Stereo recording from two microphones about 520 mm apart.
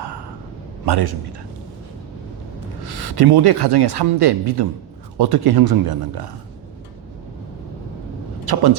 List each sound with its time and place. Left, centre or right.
0.9 s speech: right
2.8 s speech: right
8.5 s speech: right